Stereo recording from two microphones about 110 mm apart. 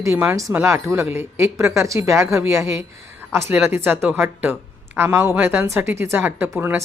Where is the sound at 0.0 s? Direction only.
20° right (ahead or behind).